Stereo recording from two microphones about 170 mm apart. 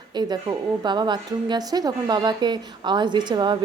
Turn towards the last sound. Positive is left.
turn(degrees=-25)  # may be behind; listen again after turning